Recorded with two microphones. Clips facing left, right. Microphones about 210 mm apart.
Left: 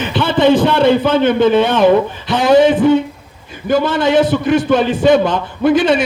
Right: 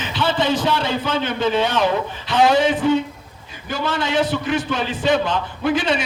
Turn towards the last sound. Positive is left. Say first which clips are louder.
# left 8 dB
turn(degrees=50)  # may be behind; listen again after turning